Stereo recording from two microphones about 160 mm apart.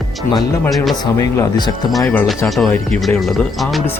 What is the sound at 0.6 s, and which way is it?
Speech, centre (ahead or behind).